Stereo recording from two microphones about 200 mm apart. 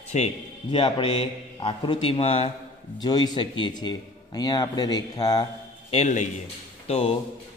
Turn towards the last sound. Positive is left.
turn(degrees=30)  # may be behind; listen again after turning